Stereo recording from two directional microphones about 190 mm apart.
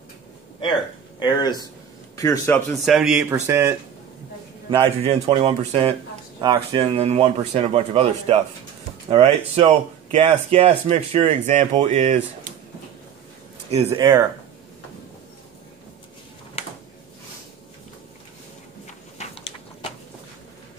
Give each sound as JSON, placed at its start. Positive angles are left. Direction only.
{"t": 1.2, "sound": "a man's voice", "side_deg": 20}
{"t": 2.7, "sound": "speech", "side_deg": 0}
{"t": 4.6, "sound": "speech", "side_deg": -30}
{"t": 13.8, "sound": "speech", "side_deg": -20}
{"t": 19.1, "sound": "a sound", "side_deg": 30}